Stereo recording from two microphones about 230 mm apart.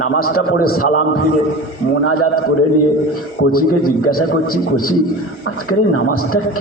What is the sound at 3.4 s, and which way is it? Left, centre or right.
Speech, left.